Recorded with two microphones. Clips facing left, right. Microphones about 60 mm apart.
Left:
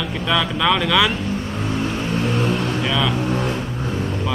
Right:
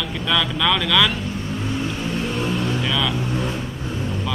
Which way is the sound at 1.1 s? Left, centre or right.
Left.